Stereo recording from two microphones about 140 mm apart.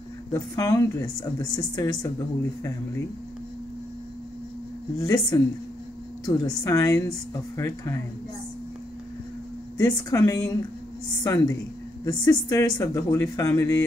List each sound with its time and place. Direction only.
0.3 s speech: 25° left (ahead or behind)
4.9 s speech: 25° left (ahead or behind)
9.8 s speech: 25° left (ahead or behind)